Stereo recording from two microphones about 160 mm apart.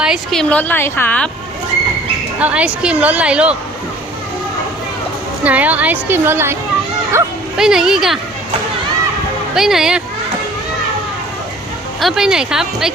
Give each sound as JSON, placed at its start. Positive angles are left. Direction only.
{"t": 0.0, "sound": "a woman's voice", "side_deg": 0}
{"t": 2.4, "sound": "a woman's voice", "side_deg": -5}
{"t": 5.4, "sound": "a woman's voice", "side_deg": -10}
{"t": 7.5, "sound": "speech", "side_deg": -5}
{"t": 9.6, "sound": "speech", "side_deg": 0}
{"t": 11.9, "sound": "speech", "side_deg": 0}